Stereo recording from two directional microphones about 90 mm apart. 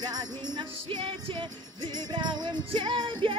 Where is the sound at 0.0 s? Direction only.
50° right (ahead or behind).